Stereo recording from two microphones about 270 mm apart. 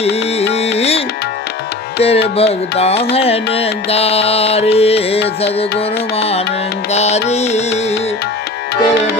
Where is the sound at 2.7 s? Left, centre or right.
Left.